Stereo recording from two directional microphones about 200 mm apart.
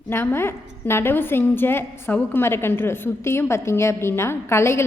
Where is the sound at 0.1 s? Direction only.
10° left (ahead or behind).